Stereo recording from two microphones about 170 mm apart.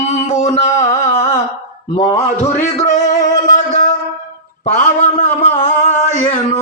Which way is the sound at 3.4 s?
50° left (ahead or behind).